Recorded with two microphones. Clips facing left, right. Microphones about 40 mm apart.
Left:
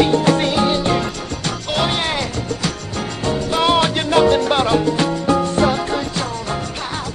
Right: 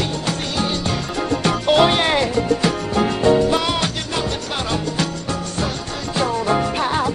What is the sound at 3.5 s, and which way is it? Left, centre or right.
Music, centre.